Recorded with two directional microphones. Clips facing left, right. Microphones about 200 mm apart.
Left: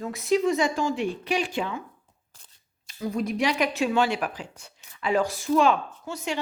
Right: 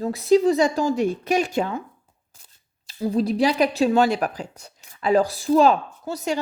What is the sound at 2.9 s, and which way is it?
Speech, 30° right (ahead or behind).